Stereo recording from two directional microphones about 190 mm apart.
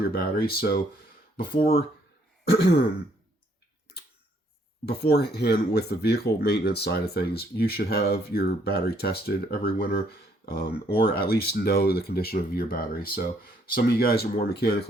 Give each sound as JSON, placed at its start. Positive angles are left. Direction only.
{"t": 0.0, "sound": "speech", "side_deg": 55}
{"t": 2.4, "sound": "throat clearing", "side_deg": 60}
{"t": 4.9, "sound": "speech", "side_deg": 55}